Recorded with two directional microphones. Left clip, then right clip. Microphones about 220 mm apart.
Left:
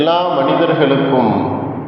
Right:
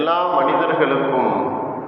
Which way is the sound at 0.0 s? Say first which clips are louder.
Left 3 dB; 55° left (ahead or behind).